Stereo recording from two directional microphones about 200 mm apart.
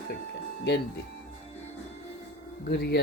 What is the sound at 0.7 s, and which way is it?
Speech, 55° left (ahead or behind).